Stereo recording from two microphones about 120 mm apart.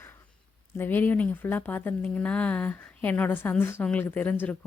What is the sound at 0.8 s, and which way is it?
Speech, 15° left (ahead or behind).